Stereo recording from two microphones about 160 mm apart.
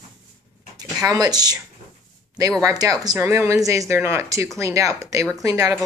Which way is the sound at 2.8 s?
25° right (ahead or behind).